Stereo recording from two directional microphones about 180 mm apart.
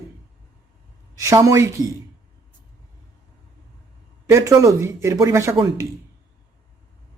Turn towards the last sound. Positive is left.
turn(degrees=-25)  # may be behind; listen again after turning